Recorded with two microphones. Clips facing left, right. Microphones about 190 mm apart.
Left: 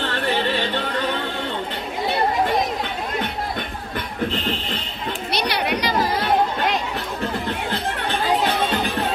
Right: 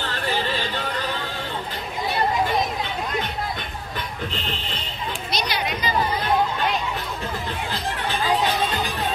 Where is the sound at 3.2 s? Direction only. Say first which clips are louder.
Left 2 dB; 55° left (ahead or behind).